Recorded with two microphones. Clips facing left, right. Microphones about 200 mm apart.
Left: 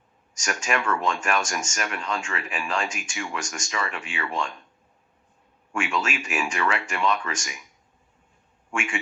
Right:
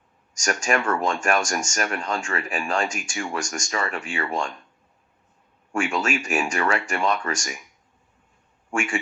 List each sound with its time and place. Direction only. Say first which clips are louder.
0.4 s speech: right 3 dB; 40° right (ahead or behind)
5.7 s speech: right 3 dB; 45° right (ahead or behind)
8.7 s a man's voice: right 4 dB; 45° right (ahead or behind)